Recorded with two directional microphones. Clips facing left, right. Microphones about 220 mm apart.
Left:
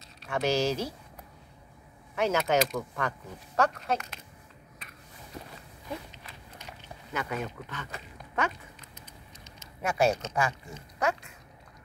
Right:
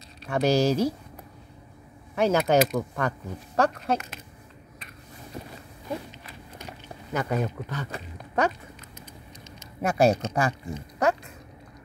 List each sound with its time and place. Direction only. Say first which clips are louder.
0.3 s speech: right 5 dB; 35° right (ahead or behind)
2.1 s speech: right 5 dB; 35° right (ahead or behind)
7.2 s speech: right 6 dB; 40° right (ahead or behind)
9.8 s speech: right 5 dB; 35° right (ahead or behind)